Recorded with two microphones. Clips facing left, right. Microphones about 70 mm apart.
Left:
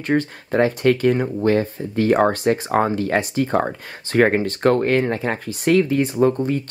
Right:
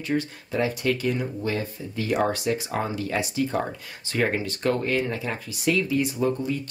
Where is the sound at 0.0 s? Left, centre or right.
Left.